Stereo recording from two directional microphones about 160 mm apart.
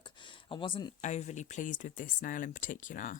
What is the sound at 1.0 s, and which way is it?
Speech, 45° left (ahead or behind).